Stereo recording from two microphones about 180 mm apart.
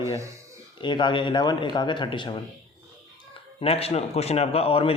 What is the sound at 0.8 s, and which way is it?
Speech, 25° left (ahead or behind).